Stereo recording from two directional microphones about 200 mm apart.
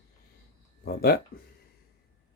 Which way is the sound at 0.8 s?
50° left (ahead or behind).